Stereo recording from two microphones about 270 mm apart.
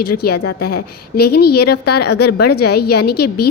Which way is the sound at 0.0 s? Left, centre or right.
Left.